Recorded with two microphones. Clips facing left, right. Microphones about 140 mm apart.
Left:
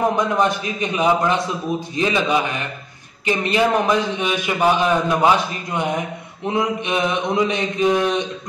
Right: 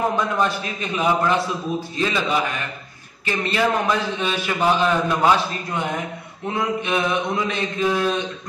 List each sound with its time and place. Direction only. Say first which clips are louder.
0.2 s a man's voice: left 3 dB; 15° left (ahead or behind)